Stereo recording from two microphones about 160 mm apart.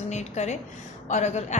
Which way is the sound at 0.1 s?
45° left (ahead or behind).